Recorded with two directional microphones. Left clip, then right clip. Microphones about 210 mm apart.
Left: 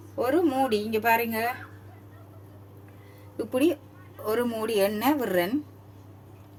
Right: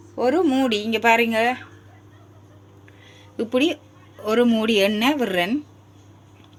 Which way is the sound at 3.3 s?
45° right (ahead or behind).